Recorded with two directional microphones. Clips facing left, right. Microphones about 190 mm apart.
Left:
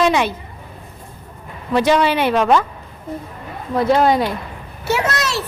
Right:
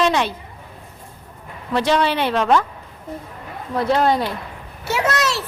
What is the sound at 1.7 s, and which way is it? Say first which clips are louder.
Speech: left 3 dB; 10° left (ahead or behind).